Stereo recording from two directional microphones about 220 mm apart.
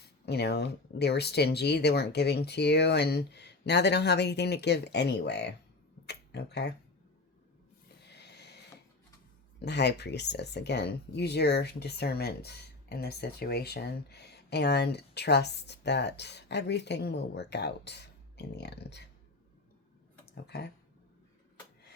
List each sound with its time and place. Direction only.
0.0 s speech: 50° left (ahead or behind)
8.2 s a sound: 50° left (ahead or behind)
9.6 s speech: 50° left (ahead or behind)
20.3 s speech: 50° left (ahead or behind)